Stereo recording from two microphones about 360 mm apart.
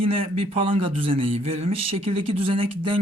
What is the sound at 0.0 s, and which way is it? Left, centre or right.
Speech, centre.